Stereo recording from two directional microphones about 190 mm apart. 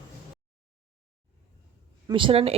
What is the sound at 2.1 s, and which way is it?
Speech, 25° right (ahead or behind).